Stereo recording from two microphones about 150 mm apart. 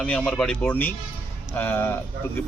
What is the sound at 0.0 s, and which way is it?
Speech, 5° left (ahead or behind).